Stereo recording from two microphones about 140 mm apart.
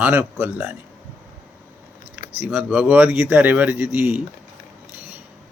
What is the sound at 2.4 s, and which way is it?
Speech, 10° right (ahead or behind).